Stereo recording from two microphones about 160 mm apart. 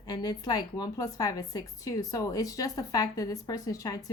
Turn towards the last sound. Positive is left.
turn(degrees=20)  # may be behind; listen again after turning